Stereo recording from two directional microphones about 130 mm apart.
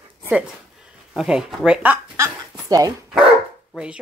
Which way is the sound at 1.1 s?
5° right (ahead or behind).